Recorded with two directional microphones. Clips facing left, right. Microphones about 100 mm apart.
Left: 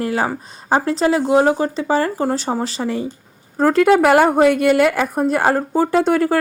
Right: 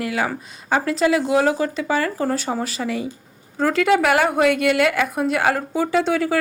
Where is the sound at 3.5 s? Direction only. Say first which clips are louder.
Left 5 dB; 45° left (ahead or behind).